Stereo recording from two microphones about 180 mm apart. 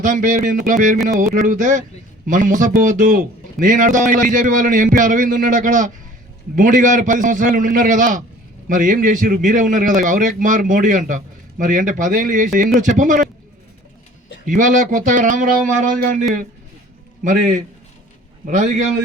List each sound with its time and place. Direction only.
0.0 s a man's voice: 45° right (ahead or behind)
14.4 s a man's voice: 45° right (ahead or behind)
17.2 s a man's voice: 45° right (ahead or behind)